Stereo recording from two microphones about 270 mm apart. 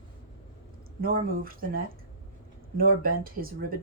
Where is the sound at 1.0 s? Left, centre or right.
Right.